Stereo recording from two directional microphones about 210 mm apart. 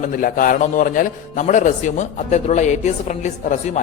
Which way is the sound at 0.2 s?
40° left (ahead or behind).